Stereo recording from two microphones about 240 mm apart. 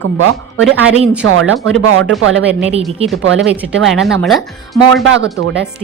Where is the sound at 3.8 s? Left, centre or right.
Centre.